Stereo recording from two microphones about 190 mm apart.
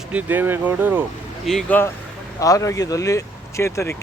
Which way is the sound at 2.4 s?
15° left (ahead or behind).